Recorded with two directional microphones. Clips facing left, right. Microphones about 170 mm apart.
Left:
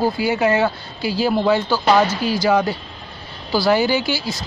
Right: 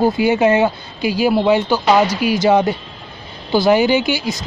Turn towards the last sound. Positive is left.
turn(degrees=-20)  # may be behind; listen again after turning